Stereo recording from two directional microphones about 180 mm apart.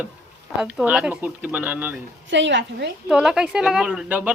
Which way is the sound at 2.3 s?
80° right.